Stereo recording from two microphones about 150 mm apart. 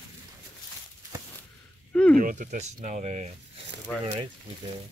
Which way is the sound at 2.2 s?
65° right (ahead or behind).